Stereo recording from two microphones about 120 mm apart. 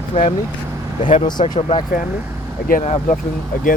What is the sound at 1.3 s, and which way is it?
Speech, 35° left (ahead or behind).